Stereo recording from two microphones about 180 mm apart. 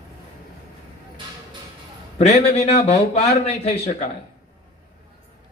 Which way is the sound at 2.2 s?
35° left (ahead or behind).